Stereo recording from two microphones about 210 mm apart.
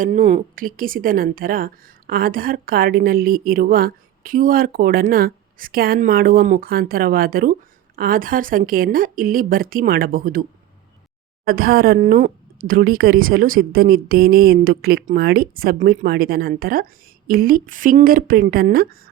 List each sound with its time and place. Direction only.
0.0 s a woman's voice: 35° right (ahead or behind)
11.4 s a woman's voice: 45° right (ahead or behind)